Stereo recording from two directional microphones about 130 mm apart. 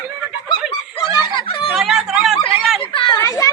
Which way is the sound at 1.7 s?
5° right (ahead or behind).